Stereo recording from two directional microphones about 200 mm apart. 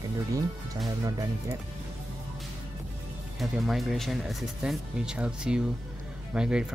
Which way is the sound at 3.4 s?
Centre (ahead or behind).